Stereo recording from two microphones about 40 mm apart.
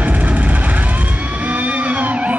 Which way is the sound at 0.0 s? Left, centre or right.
Right.